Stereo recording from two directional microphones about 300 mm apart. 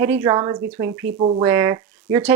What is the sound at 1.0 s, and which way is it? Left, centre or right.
Speech, right.